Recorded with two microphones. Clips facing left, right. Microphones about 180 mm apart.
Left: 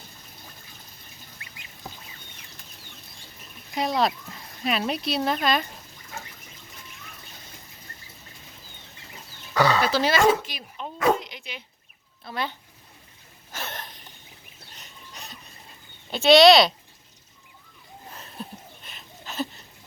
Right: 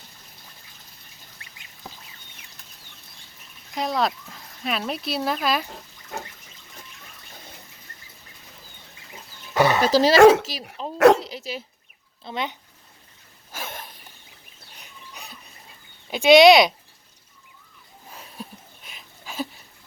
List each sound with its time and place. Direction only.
3.8 s speech: centre (ahead or behind)
6.1 s water: 55° right (ahead or behind)
9.6 s chicken: 20° right (ahead or behind)
9.8 s speech: 35° right (ahead or behind)
10.2 s speech: 75° right (ahead or behind)
10.9 s dog: 75° right (ahead or behind)
11.2 s dog: 35° right (ahead or behind)
12.2 s speech: 20° right (ahead or behind)
13.5 s a sound: 10° right (ahead or behind)
16.0 s speech: 15° right (ahead or behind)
18.1 s a sound: 5° right (ahead or behind)